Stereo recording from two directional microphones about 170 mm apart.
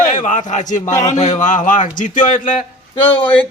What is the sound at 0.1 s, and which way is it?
Speech, 45° left (ahead or behind).